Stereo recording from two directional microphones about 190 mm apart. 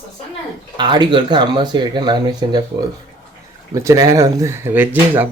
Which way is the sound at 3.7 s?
20° right (ahead or behind).